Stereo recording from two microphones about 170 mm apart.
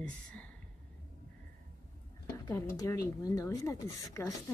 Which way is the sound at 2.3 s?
20° left (ahead or behind).